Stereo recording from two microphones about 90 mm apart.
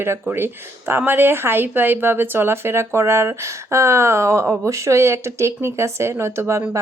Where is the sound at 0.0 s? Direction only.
25° right (ahead or behind).